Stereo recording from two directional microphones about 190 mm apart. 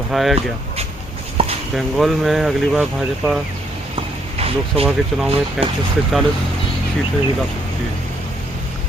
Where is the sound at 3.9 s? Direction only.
30° right (ahead or behind).